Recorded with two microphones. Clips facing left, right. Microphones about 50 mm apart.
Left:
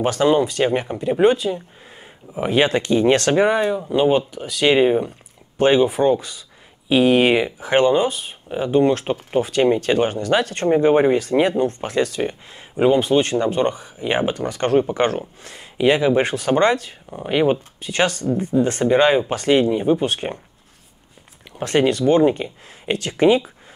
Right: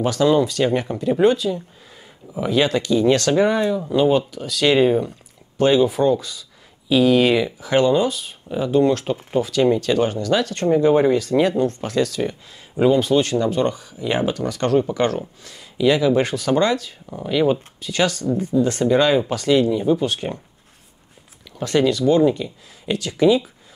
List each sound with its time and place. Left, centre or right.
0.0 s speech: left
3.4 s speech: left
21.5 s speech: left